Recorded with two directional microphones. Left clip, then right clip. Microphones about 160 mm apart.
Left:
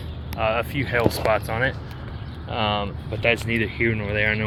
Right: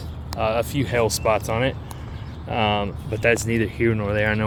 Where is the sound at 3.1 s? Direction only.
55° right (ahead or behind).